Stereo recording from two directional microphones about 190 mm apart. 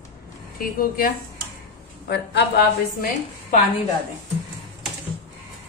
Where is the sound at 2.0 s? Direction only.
60° left (ahead or behind).